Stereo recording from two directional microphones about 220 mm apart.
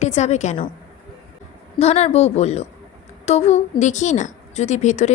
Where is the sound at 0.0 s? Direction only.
30° left (ahead or behind).